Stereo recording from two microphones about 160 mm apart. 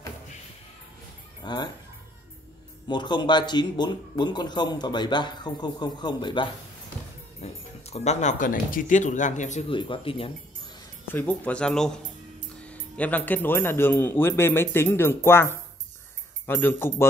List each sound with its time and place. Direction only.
1.4 s speech: 25° left (ahead or behind)
2.9 s speech: 30° left (ahead or behind)
7.4 s speech: 45° left (ahead or behind)
9.7 s speech: 30° left (ahead or behind)
11.1 s a man's voice: 10° left (ahead or behind)